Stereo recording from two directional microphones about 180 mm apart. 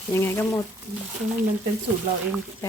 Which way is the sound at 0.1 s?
15° left (ahead or behind).